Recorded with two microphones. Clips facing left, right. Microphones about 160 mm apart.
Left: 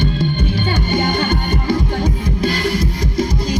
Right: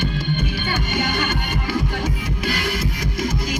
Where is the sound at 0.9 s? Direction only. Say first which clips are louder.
Left 6 dB; 35° left (ahead or behind).